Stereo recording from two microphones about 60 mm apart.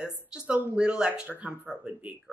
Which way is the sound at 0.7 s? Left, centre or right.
Centre.